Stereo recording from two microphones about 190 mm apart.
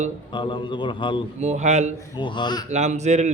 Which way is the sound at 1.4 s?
35° right (ahead or behind).